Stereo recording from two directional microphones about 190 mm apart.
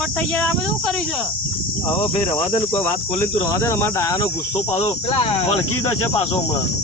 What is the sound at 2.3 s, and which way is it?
Cricket, 15° left (ahead or behind).